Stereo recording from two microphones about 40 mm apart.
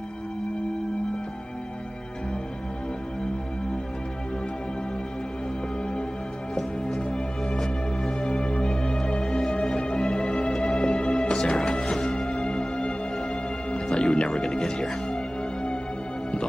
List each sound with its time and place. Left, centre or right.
7.0 s music: left
7.5 s music: centre
8.2 s music: left